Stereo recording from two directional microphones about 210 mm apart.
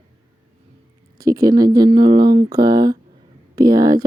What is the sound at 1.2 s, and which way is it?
Speech, 15° right (ahead or behind).